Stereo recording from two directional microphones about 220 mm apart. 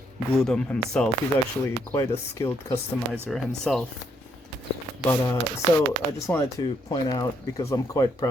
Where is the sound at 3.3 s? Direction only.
Centre (ahead or behind).